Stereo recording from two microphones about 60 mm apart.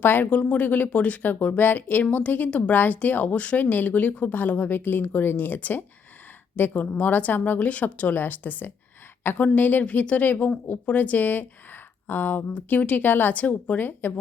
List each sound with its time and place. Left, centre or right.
0.0 s speech: left